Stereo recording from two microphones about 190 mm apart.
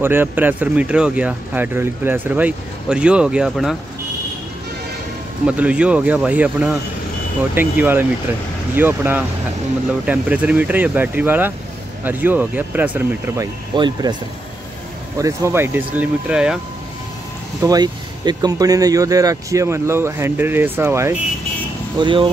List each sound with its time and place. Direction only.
0.0 s speech: 10° right (ahead or behind)
5.5 s speech: 5° right (ahead or behind)
13.7 s speech: 25° right (ahead or behind)
15.1 s speech: 15° right (ahead or behind)
17.6 s speech: 20° right (ahead or behind)
21.9 s speech: 25° right (ahead or behind)